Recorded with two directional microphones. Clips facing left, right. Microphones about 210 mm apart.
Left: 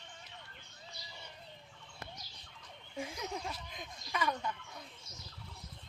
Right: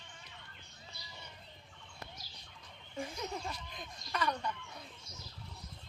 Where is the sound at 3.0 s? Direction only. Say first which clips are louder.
Even; 5° left (ahead or behind).